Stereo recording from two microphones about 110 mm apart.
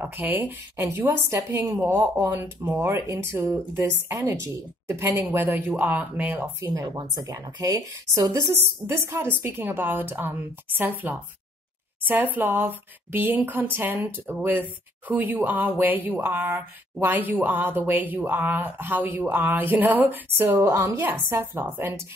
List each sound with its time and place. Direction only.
0.0 s speech: 15° right (ahead or behind)
6.7 s speech: 30° right (ahead or behind)